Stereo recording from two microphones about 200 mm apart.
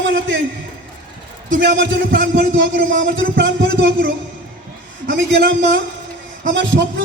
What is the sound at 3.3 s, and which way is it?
Speech, 65° right (ahead or behind).